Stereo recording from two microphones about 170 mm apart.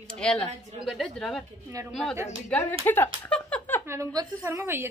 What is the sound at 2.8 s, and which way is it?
Speech, 10° left (ahead or behind).